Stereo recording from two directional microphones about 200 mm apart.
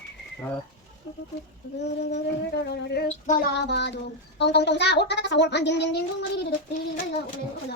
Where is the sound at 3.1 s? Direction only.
40° left (ahead or behind).